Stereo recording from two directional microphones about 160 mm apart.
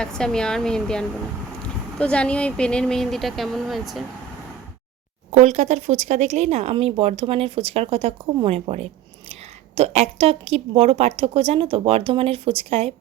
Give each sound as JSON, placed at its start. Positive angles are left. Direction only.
{"t": 0.0, "sound": "speech", "side_deg": 5}
{"t": 5.3, "sound": "speech", "side_deg": -45}